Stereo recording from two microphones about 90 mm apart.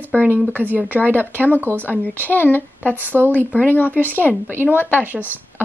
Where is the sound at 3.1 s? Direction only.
20° right (ahead or behind).